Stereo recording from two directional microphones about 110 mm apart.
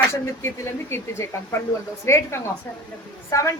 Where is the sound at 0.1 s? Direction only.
25° left (ahead or behind).